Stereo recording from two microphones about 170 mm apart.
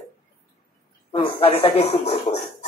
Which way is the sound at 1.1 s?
35° left (ahead or behind).